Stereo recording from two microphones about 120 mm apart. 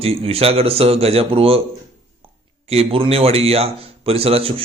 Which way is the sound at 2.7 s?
55° right (ahead or behind).